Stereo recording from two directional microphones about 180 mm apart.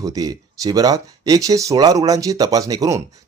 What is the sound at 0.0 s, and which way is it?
Speech, 20° right (ahead or behind).